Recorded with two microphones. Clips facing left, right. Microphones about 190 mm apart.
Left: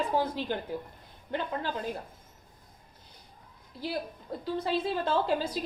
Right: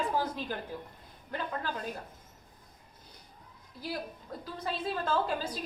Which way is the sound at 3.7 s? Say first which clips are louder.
Left 4 dB; 25° left (ahead or behind).